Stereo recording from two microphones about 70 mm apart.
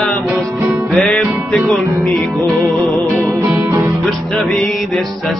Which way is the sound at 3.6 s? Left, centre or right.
Right.